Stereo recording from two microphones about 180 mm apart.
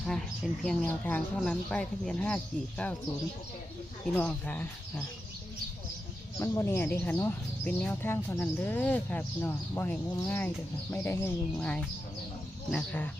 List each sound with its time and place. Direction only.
0.6 s speech: centre (ahead or behind)
4.1 s speech: 10° left (ahead or behind)
6.4 s speech: 15° left (ahead or behind)